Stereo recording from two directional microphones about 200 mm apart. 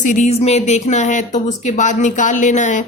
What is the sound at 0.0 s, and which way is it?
Speech, 40° left (ahead or behind).